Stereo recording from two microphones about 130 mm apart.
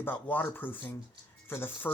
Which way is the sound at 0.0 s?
15° left (ahead or behind).